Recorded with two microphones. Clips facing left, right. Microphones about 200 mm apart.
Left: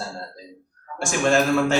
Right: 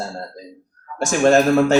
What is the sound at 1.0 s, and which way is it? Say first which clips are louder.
Speech: right 5 dB; 40° right (ahead or behind).